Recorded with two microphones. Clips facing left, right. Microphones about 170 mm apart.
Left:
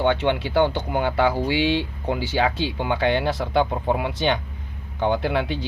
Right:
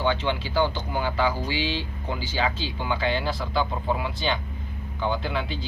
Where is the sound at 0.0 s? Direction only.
60° left (ahead or behind).